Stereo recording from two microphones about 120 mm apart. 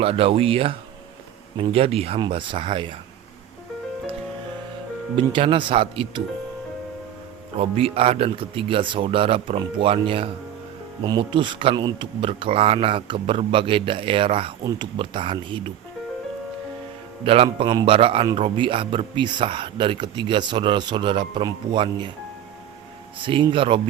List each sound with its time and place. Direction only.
0.0 s speech: 50° right (ahead or behind)
5.1 s speech: 45° right (ahead or behind)
7.6 s speech: 50° right (ahead or behind)
11.0 s speech: 40° right (ahead or behind)
14.6 s speech: 30° right (ahead or behind)
14.9 s speech: 45° right (ahead or behind)
17.2 s speech: 50° right (ahead or behind)
23.1 s speech: 45° right (ahead or behind)